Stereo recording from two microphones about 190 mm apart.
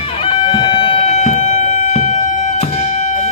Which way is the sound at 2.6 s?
40° left (ahead or behind).